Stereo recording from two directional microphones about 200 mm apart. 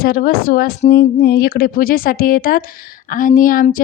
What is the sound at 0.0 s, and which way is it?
A woman's voice, 50° left (ahead or behind).